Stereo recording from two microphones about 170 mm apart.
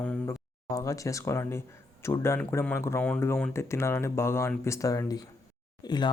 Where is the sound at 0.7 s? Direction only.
20° left (ahead or behind).